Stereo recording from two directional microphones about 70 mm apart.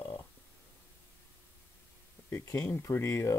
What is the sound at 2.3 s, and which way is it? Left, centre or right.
Speech, left.